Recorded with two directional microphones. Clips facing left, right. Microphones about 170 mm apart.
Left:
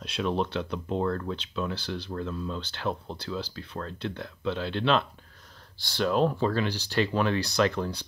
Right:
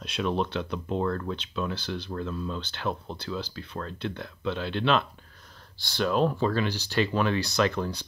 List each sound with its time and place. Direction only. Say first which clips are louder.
0.0 s speech: even; 35° left (ahead or behind)